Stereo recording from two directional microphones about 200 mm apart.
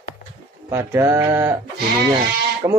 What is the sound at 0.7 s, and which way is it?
Speech, 15° right (ahead or behind).